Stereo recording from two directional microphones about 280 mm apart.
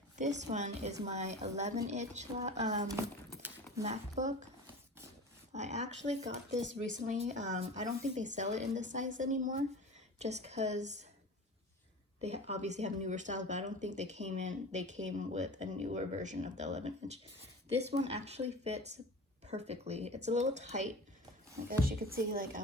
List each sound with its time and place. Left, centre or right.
0.2 s a woman's voice: right
3.8 s speech: right
5.5 s speech: right
12.2 s a woman's voice: right